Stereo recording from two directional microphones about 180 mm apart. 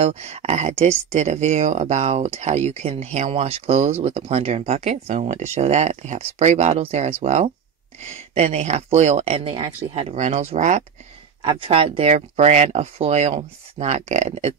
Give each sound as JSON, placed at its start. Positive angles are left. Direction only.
{"t": 0.0, "sound": "speech", "side_deg": -35}